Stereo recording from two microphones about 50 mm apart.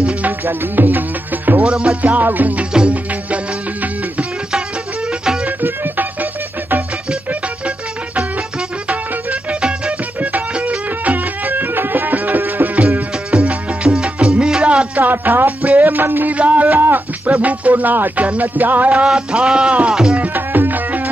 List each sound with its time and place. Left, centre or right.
0.5 s music: right
1.6 s music: right
2.1 s music: right
8.2 s music: centre; by 12.8 s right
13.3 s music: right
15.0 s music: right
16.3 s a sound: right
17.3 s music: right
19.1 s music: centre
19.9 s music: centre
20.2 s music: right